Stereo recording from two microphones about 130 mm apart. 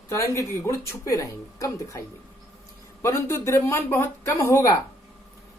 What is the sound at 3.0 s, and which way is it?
Speech, 20° left (ahead or behind).